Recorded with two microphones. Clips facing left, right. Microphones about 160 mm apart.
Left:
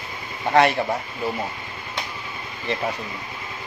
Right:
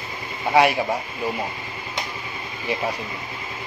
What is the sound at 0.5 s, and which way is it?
Speech, 10° right (ahead or behind).